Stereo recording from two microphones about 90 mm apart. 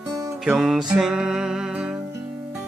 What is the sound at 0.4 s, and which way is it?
Music, 5° right (ahead or behind).